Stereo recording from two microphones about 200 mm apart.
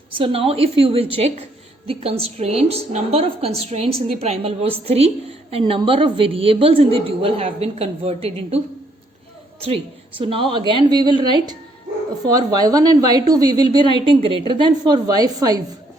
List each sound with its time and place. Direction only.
0.1 s a woman's voice: 25° right (ahead or behind)